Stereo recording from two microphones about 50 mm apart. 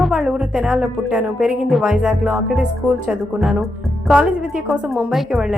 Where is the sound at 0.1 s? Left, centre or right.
Centre.